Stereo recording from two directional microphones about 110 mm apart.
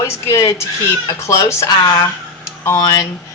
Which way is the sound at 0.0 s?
25° left (ahead or behind).